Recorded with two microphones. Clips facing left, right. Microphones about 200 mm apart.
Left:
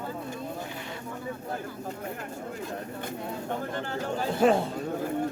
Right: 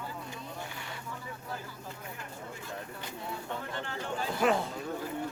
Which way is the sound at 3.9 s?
40° left (ahead or behind).